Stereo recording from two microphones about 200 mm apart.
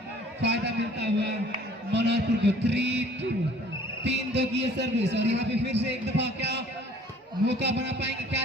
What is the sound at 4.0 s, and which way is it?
Music, 60° right (ahead or behind).